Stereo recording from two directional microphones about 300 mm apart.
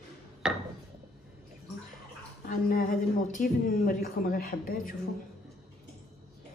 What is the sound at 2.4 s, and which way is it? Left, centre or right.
A woman's voice, left.